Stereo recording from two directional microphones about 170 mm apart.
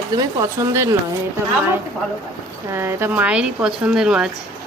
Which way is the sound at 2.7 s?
15° right (ahead or behind).